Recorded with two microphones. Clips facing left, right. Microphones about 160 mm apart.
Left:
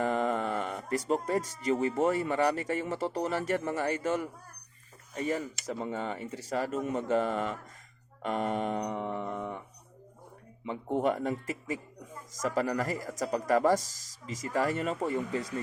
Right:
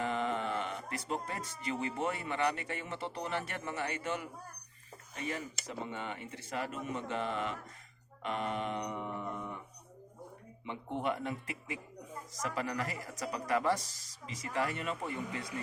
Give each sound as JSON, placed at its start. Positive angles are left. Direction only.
{"t": 0.0, "sound": "speech", "side_deg": 45}
{"t": 10.7, "sound": "speech", "side_deg": 40}